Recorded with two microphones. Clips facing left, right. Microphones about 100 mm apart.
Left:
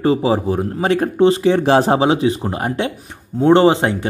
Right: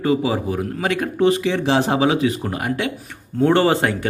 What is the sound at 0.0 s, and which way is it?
Speech, 30° left (ahead or behind).